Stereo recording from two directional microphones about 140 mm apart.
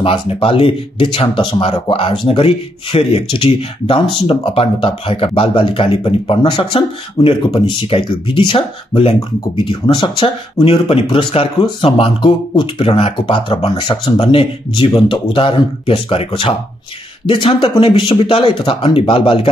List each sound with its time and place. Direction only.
0.0 s speech: 40° left (ahead or behind)